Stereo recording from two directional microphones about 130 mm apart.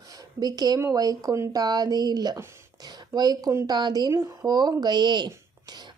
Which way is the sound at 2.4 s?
20° right (ahead or behind).